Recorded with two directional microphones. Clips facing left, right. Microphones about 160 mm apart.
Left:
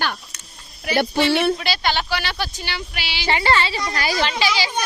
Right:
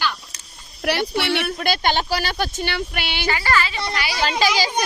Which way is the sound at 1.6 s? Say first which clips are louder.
Right 2 dB; 50° right (ahead or behind).